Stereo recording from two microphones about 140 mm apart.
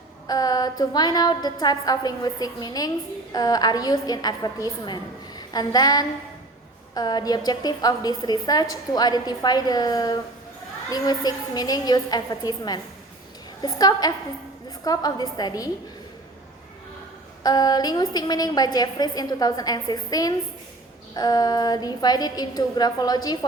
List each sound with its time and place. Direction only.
0.3 s a woman's voice: 30° left (ahead or behind)
5.4 s a sound: 30° left (ahead or behind)
6.9 s a woman's voice: 30° left (ahead or behind)
17.4 s a woman's voice: 30° left (ahead or behind)